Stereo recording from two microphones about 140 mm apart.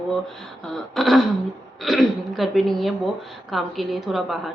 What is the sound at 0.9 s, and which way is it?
Speech, centre (ahead or behind).